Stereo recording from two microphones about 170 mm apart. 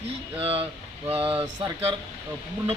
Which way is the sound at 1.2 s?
10° right (ahead or behind).